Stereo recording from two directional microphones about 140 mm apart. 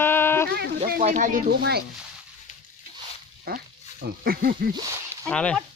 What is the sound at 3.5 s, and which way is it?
Speech, 90° right.